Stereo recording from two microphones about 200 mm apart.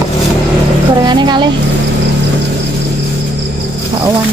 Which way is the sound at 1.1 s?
20° right (ahead or behind).